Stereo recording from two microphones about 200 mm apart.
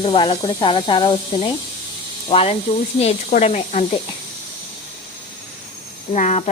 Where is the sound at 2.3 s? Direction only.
30° left (ahead or behind).